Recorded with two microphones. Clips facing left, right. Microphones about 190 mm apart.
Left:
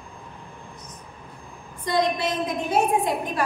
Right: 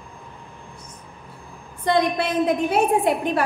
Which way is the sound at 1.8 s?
60° right (ahead or behind).